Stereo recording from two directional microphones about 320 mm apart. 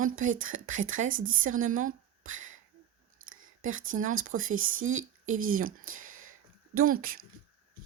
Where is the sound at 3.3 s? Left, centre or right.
Right.